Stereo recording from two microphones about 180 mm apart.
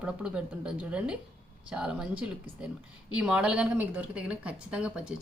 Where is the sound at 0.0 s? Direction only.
5° right (ahead or behind).